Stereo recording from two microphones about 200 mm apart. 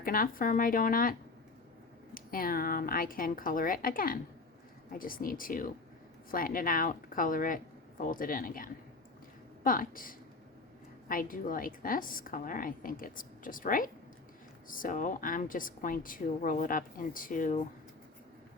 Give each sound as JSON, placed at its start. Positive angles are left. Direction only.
{"t": 0.0, "sound": "speech", "side_deg": 45}
{"t": 2.1, "sound": "speech", "side_deg": 45}